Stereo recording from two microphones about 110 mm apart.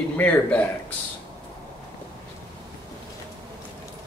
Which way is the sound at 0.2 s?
15° left (ahead or behind).